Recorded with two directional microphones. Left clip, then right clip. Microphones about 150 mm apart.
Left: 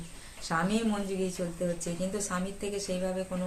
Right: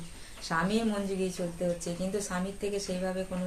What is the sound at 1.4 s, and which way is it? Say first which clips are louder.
Speech: even; 5° left (ahead or behind).